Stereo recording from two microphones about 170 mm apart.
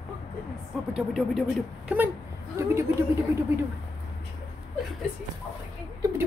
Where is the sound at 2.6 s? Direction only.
15° right (ahead or behind).